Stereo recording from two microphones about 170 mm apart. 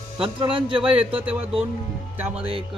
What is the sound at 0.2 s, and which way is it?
Speech, 30° right (ahead or behind).